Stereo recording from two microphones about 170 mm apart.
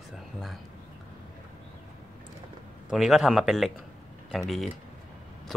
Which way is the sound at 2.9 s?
5° right (ahead or behind).